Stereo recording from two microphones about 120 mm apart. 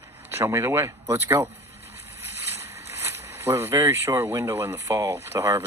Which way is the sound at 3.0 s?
20° right (ahead or behind).